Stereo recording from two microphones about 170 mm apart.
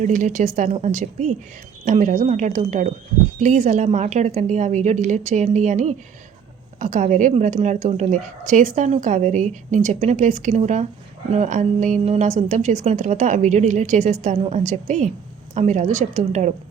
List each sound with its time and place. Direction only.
0.0 s a woman's voice: 50° right (ahead or behind)